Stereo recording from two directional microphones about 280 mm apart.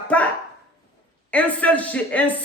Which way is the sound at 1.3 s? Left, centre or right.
Centre.